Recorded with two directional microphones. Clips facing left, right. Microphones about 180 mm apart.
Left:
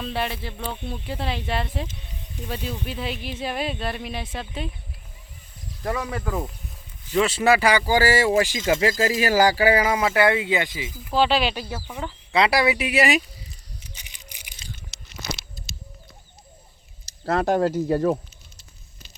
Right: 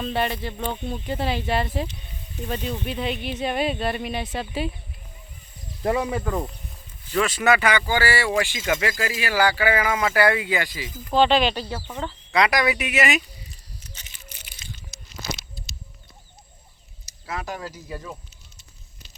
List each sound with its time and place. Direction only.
0.0 s speech: centre (ahead or behind)
5.8 s speech: 25° right (ahead or behind)
6.1 s speech: centre (ahead or behind)
7.1 s speech: 25° left (ahead or behind)
10.1 s speech: 20° left (ahead or behind)
10.8 s speech: 5° left (ahead or behind)
12.3 s speech: 30° left (ahead or behind)
13.8 s a sound: 15° left (ahead or behind)
14.8 s a sound: 70° left (ahead or behind)
17.2 s speech: 60° left (ahead or behind)